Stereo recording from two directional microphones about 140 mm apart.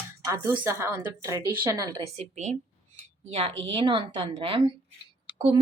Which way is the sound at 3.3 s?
45° right (ahead or behind).